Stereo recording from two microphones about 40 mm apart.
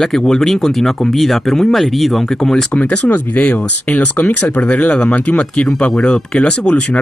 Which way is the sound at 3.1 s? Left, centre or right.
Left.